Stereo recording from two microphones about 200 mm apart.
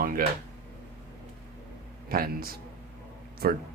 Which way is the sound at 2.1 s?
50° right (ahead or behind).